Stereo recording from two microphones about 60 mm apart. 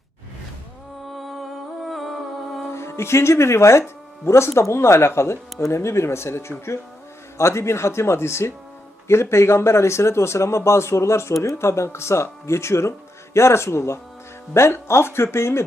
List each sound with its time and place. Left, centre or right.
1.1 s music: centre
2.7 s speech: left